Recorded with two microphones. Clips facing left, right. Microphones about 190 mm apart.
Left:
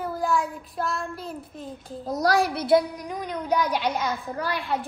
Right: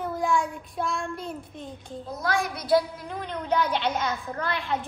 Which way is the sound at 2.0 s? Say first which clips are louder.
Left 6 dB; 40° left (ahead or behind).